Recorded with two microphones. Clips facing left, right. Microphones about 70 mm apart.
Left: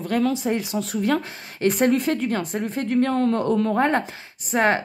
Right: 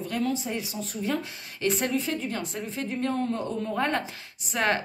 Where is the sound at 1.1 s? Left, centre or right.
Left.